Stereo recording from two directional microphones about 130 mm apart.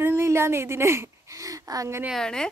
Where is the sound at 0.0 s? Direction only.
20° right (ahead or behind).